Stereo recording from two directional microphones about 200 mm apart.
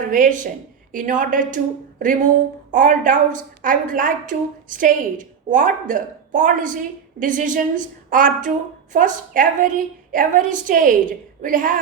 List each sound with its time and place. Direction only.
0.1 s a woman's voice: 40° right (ahead or behind)